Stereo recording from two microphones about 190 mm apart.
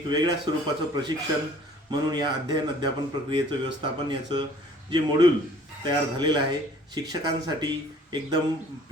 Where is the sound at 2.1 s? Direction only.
20° right (ahead or behind).